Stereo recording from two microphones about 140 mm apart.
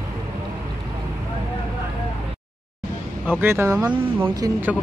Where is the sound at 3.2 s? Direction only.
15° right (ahead or behind).